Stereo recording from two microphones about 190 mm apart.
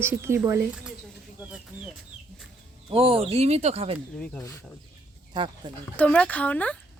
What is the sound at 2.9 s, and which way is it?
Speech, 30° right (ahead or behind).